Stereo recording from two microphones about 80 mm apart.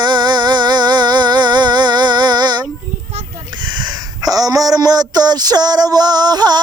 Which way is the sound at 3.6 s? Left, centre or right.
Right.